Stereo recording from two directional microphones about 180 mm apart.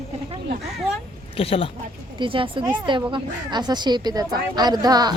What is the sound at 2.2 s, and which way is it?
A woman's voice, 30° right (ahead or behind).